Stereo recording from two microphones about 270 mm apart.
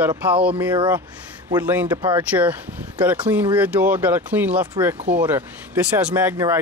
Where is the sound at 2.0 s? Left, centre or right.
Centre.